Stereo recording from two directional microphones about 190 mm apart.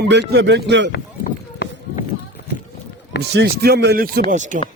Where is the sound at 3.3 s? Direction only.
60° right (ahead or behind).